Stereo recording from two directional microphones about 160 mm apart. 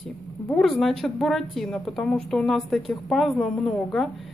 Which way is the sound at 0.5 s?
Centre (ahead or behind).